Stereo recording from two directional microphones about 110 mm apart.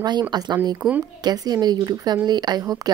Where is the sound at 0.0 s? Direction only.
40° right (ahead or behind).